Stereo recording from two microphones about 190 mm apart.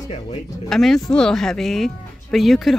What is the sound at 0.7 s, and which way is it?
Speech, centre (ahead or behind).